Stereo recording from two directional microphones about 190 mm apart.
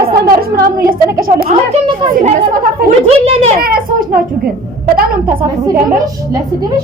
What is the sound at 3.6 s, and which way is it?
A woman's voice, 50° right (ahead or behind).